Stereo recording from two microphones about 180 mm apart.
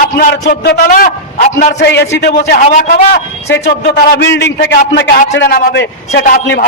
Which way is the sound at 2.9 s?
70° left (ahead or behind).